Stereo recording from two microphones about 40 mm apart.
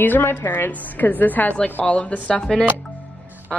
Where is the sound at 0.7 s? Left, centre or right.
Left.